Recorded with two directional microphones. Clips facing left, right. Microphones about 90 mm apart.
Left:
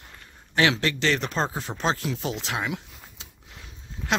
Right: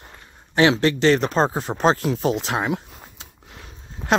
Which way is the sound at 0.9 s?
35° right (ahead or behind).